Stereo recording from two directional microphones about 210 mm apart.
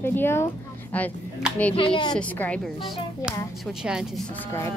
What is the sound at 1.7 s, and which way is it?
Speech, 25° left (ahead or behind).